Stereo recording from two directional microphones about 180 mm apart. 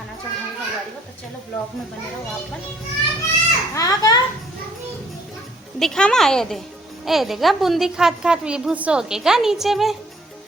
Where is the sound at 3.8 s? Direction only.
20° left (ahead or behind).